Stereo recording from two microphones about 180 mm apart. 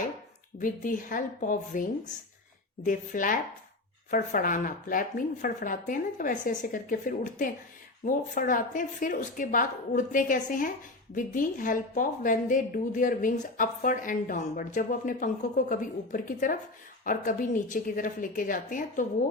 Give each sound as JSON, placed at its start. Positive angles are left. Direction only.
{"t": 0.6, "sound": "a woman's voice", "side_deg": 45}